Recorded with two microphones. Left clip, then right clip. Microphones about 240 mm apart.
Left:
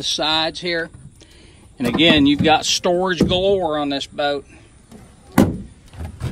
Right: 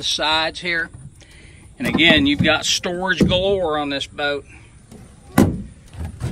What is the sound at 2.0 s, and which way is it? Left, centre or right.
Speech, centre.